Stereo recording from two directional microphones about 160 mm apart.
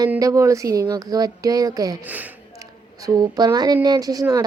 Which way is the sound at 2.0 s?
10° right (ahead or behind).